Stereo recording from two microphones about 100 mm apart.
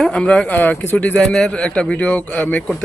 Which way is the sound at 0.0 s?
10° left (ahead or behind).